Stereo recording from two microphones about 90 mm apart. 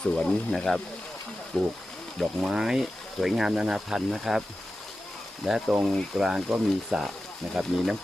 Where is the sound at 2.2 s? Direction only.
5° right (ahead or behind).